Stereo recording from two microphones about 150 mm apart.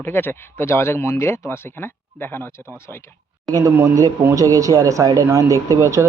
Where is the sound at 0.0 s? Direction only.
15° left (ahead or behind).